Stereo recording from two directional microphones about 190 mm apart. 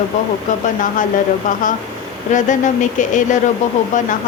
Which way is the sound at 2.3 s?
40° left (ahead or behind).